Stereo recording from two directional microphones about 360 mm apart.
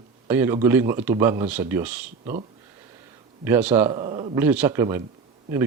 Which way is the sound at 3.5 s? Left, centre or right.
Centre.